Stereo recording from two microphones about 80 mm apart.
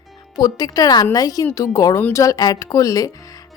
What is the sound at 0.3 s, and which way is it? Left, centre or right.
A woman's voice, left.